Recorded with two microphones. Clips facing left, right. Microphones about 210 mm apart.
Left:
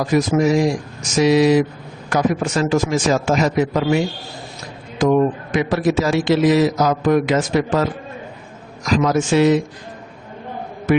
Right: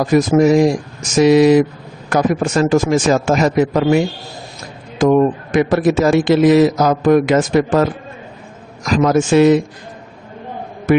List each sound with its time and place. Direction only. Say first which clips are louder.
0.0 s a man's voice: right 4 dB; 50° right (ahead or behind)
9.0 s a man's voice: right 5 dB; 55° right (ahead or behind)